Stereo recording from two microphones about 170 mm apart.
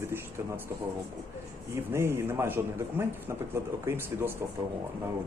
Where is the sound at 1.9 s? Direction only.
15° right (ahead or behind).